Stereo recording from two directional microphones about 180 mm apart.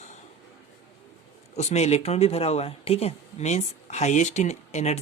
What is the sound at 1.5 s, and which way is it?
Speech, 35° left (ahead or behind).